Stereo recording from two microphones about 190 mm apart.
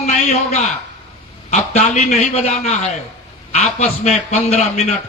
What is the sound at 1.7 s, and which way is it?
A man's voice, 35° left (ahead or behind).